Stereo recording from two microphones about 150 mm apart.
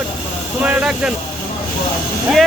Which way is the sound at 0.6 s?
5° right (ahead or behind).